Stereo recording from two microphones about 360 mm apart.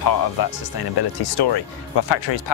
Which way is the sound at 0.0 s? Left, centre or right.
Left.